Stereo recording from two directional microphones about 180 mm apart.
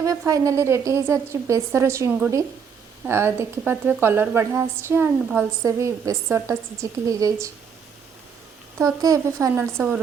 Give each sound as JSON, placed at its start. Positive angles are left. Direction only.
{"t": 0.0, "sound": "a woman's voice", "side_deg": -20}
{"t": 8.8, "sound": "a woman's voice", "side_deg": -20}